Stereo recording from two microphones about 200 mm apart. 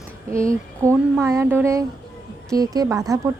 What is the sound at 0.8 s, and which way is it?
A woman's voice, 15° right (ahead or behind).